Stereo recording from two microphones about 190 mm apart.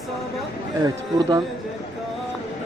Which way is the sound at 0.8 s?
20° right (ahead or behind).